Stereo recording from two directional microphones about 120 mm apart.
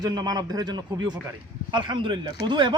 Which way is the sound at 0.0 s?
35° right (ahead or behind).